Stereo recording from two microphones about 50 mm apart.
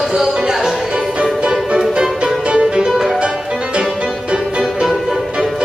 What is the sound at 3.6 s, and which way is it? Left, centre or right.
Music, centre.